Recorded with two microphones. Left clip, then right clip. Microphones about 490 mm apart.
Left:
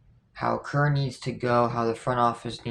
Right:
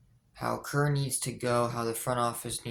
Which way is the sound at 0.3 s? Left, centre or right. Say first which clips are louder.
Left 5 dB; right.